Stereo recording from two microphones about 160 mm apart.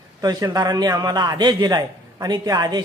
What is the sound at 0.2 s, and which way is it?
A man's voice, 20° right (ahead or behind).